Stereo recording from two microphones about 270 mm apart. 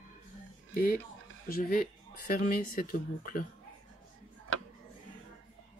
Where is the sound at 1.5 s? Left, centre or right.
Left.